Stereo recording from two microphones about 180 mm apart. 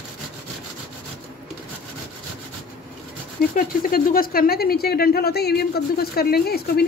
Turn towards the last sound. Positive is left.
turn(degrees=60)  # may be behind; listen again after turning